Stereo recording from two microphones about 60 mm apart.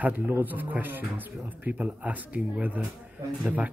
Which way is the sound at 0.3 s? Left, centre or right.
Right.